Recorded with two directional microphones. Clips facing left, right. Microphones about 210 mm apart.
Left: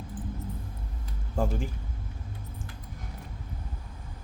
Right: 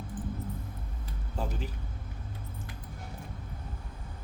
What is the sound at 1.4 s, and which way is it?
Speech, 50° left (ahead or behind).